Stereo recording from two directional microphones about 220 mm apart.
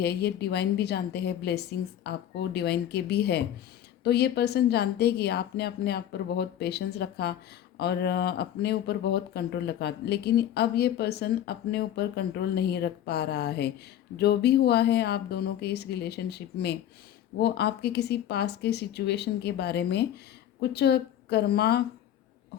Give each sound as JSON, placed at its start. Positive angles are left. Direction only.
{"t": 0.0, "sound": "speech", "side_deg": 50}